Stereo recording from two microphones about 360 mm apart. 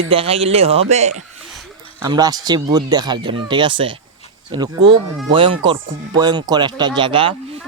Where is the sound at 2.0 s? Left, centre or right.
Centre.